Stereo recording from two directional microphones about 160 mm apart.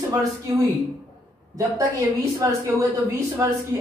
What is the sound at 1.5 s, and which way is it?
A woman's voice, 20° right (ahead or behind).